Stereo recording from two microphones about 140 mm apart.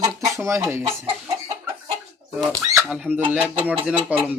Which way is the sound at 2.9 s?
10° right (ahead or behind).